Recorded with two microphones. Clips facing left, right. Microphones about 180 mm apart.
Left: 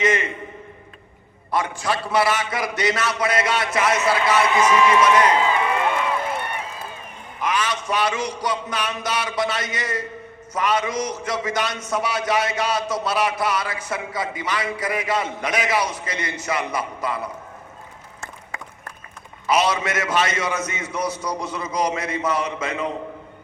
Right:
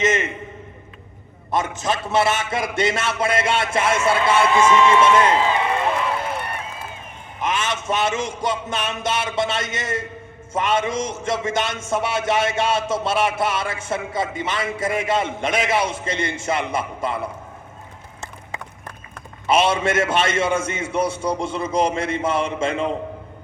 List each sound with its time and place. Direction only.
0.0 s a man's voice: 25° right (ahead or behind)
1.5 s a man's voice: 20° right (ahead or behind)
7.4 s a man's voice: 25° right (ahead or behind)
19.5 s a man's voice: 25° right (ahead or behind)